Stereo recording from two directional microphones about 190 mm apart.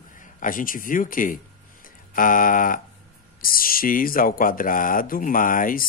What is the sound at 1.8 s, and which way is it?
Music, 45° left (ahead or behind).